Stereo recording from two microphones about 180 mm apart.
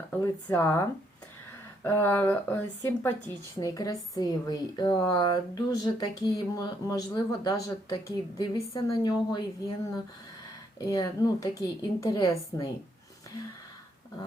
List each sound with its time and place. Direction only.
0.1 s speech: 10° left (ahead or behind)
10.8 s speech: 20° left (ahead or behind)